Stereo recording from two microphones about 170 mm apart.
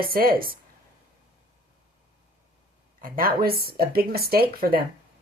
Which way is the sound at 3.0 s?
55° right (ahead or behind).